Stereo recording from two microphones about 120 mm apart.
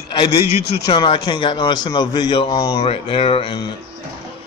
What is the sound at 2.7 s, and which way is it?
Speech, 50° left (ahead or behind).